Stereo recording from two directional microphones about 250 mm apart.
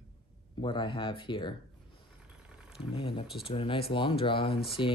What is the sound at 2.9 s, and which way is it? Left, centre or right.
Speech, left.